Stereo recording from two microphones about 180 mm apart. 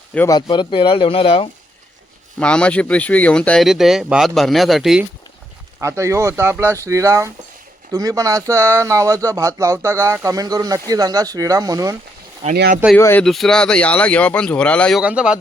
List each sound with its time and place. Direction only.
0.3 s speech: 25° left (ahead or behind)
2.4 s speech: 5° left (ahead or behind)
5.8 s speech: 15° right (ahead or behind)
13.0 s speech: 15° left (ahead or behind)
13.2 s speech: centre (ahead or behind)
15.0 s speech: 5° right (ahead or behind)